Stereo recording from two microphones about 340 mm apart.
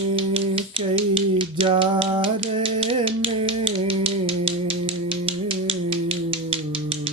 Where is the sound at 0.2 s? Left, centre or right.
Centre.